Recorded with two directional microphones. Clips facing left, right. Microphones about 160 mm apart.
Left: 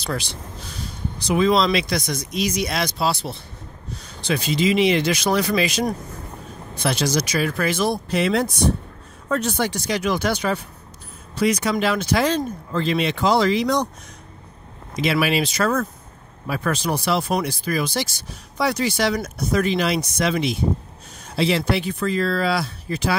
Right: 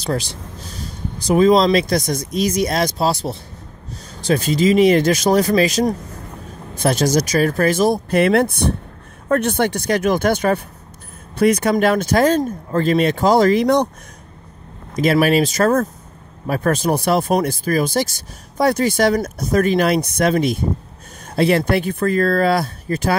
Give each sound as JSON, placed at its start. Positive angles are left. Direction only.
{"t": 0.0, "sound": "speech", "side_deg": -40}
{"t": 15.0, "sound": "speech", "side_deg": -45}